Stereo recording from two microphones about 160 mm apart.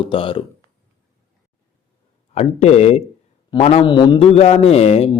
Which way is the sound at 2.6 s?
45° left (ahead or behind).